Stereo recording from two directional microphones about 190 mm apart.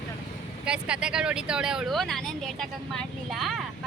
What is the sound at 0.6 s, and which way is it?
Speech, 5° right (ahead or behind).